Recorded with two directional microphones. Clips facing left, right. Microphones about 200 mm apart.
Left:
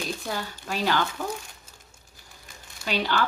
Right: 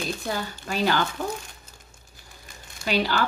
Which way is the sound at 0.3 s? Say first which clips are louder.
Right 2 dB; centre (ahead or behind).